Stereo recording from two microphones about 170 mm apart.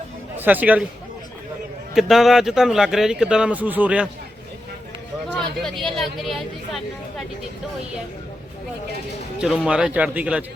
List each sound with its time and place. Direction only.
0.3 s speech: 10° right (ahead or behind)
2.0 s speech: centre (ahead or behind)
5.6 s speech: centre (ahead or behind)
9.4 s speech: 5° right (ahead or behind)